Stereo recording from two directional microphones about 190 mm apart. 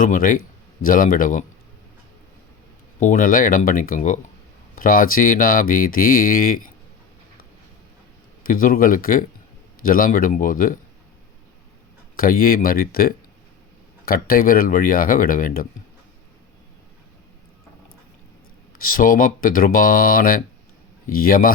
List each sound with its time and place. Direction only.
0.0 s speech: 45° left (ahead or behind)
3.0 s speech: 45° left (ahead or behind)
8.4 s speech: 45° left (ahead or behind)
12.1 s a man's voice: 50° left (ahead or behind)
18.8 s speech: 50° left (ahead or behind)